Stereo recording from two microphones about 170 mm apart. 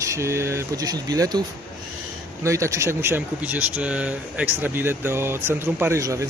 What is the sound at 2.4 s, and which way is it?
Speech, 15° right (ahead or behind).